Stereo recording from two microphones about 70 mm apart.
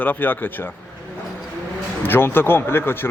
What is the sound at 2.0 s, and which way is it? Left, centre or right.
A man's voice, left.